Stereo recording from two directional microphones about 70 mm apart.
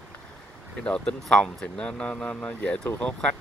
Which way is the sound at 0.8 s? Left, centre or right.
Centre.